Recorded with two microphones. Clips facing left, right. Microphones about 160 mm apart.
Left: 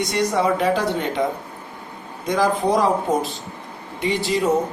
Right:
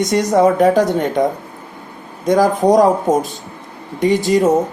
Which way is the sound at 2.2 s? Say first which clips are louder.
Right 7 dB; 45° right (ahead or behind).